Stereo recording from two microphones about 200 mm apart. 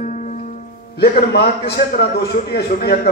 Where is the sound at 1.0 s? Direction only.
55° left (ahead or behind).